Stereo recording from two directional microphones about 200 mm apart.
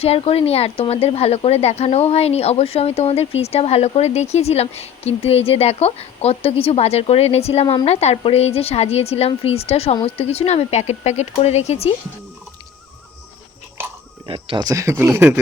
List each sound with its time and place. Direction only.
0.0 s speech: 30° left (ahead or behind)
14.3 s speech: 25° right (ahead or behind)